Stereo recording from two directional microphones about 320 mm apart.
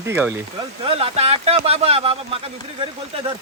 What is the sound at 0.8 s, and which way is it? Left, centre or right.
Speech, centre.